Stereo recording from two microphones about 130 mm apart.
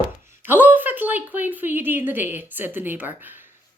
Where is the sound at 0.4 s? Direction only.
15° right (ahead or behind).